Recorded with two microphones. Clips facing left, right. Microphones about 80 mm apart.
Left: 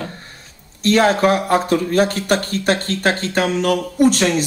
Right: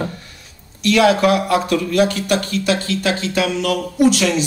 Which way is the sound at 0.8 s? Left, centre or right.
Left.